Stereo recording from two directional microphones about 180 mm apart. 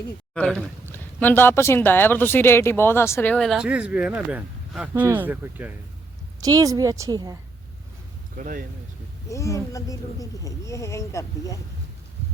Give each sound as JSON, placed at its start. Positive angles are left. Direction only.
{"t": 0.3, "sound": "a woman's voice", "side_deg": 5}
{"t": 8.4, "sound": "speech", "side_deg": -45}
{"t": 9.3, "sound": "speech", "side_deg": 15}